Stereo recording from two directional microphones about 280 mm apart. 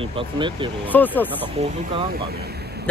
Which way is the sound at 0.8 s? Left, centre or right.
Centre.